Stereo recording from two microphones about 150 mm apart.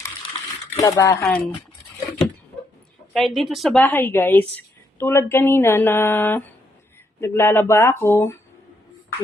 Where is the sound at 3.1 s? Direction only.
Centre (ahead or behind).